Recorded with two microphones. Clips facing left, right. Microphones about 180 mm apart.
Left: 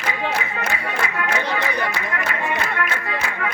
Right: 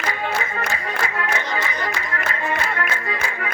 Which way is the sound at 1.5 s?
65° left (ahead or behind).